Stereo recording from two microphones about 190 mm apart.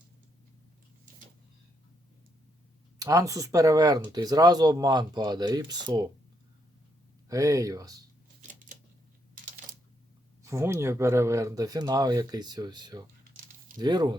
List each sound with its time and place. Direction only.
3.0 s speech: 15° right (ahead or behind)
7.3 s speech: 15° right (ahead or behind)
10.4 s speech: 15° right (ahead or behind)